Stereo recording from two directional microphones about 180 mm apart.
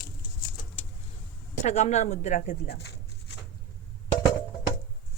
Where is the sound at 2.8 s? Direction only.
70° left (ahead or behind).